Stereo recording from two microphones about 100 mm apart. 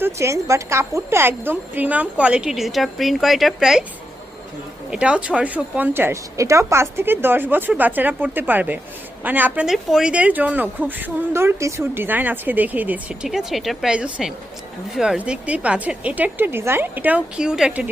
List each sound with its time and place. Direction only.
0.0 s a woman's voice: 30° right (ahead or behind); by 3.8 s 5° right (ahead or behind)
4.9 s a woman's voice: 10° right (ahead or behind)
9.6 s a woman's voice: 5° right (ahead or behind)
13.2 s a woman's voice: 5° right (ahead or behind)
15.2 s a woman's voice: 15° right (ahead or behind)